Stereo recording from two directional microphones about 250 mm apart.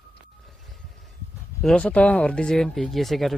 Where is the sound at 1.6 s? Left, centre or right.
Centre.